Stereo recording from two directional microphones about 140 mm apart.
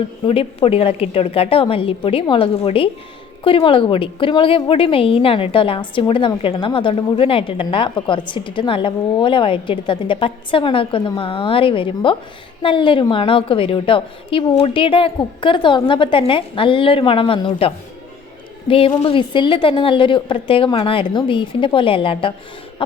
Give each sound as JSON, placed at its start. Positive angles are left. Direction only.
{"t": 0.3, "sound": "a woman's voice", "side_deg": 40}
{"t": 18.7, "sound": "a woman's voice", "side_deg": 40}